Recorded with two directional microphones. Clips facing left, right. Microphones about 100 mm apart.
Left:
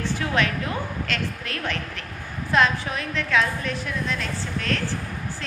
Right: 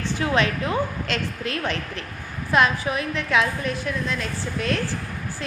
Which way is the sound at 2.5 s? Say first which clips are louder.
Right 1 dB; 10° right (ahead or behind).